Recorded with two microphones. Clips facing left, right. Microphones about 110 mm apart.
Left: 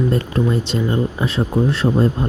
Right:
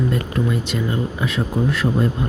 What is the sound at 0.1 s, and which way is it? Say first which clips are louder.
Speech: left 3 dB; 30° left (ahead or behind).